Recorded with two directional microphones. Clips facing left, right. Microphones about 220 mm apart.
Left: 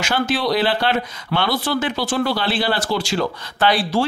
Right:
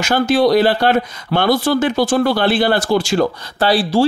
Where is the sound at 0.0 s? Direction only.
45° right (ahead or behind).